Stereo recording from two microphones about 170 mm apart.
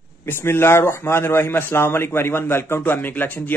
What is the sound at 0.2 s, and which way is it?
A man's voice, 15° left (ahead or behind).